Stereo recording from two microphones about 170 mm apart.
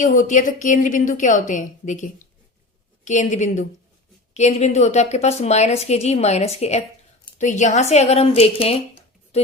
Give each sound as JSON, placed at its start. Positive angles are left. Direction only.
{"t": 0.0, "sound": "a woman's voice", "side_deg": 50}